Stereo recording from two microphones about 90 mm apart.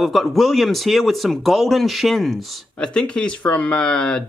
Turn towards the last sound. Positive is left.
turn(degrees=10)  # may be behind; listen again after turning